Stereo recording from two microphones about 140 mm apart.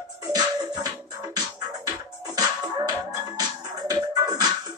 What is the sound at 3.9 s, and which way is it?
Music, 30° right (ahead or behind).